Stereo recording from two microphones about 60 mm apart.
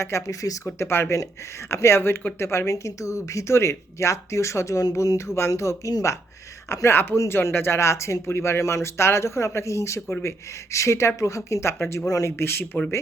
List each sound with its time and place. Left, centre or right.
0.0 s speech: left
5.1 s speech: left
6.9 s speech: left
12.0 s speech: left
12.4 s speech: left